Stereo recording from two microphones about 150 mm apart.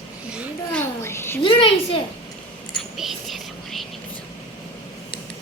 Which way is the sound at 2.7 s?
Centre (ahead or behind).